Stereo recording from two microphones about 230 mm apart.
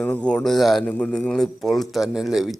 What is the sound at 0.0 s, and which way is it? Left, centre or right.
Speech, centre.